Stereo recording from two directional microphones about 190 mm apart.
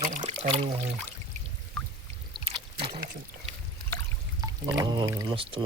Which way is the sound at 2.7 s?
30° right (ahead or behind).